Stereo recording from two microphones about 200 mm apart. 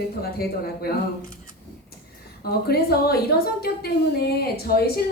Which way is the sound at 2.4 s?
50° left (ahead or behind).